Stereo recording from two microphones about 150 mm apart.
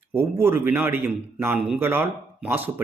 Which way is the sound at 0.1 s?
15° right (ahead or behind).